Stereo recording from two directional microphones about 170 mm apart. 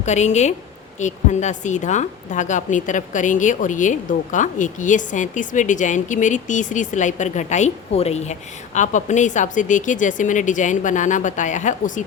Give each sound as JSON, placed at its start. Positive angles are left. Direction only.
{"t": 0.0, "sound": "a woman's voice", "side_deg": 45}